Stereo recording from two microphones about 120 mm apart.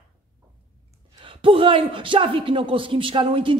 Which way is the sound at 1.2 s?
50° right (ahead or behind).